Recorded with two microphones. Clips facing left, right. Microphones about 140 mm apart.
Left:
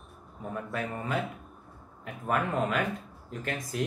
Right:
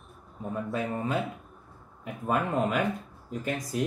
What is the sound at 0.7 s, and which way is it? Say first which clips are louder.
Speech: right 4 dB; 25° right (ahead or behind).